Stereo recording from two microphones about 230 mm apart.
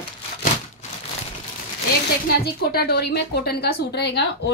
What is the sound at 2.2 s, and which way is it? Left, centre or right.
A woman's voice, left.